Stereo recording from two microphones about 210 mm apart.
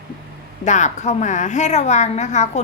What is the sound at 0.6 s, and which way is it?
A woman's voice, 35° left (ahead or behind).